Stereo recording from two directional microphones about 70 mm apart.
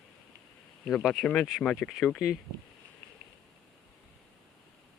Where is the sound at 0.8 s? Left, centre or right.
Centre.